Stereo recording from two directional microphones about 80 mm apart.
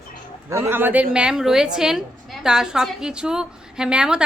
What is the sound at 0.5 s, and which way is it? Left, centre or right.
Speech, right.